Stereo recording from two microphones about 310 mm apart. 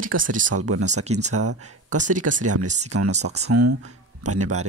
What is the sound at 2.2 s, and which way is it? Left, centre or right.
Speech, right.